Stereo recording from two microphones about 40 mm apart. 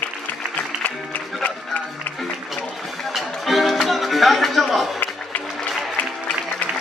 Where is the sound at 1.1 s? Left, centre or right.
Left.